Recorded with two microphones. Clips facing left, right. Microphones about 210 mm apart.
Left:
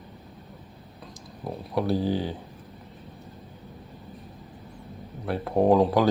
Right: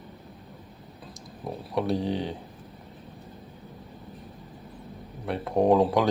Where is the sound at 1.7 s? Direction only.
Centre (ahead or behind).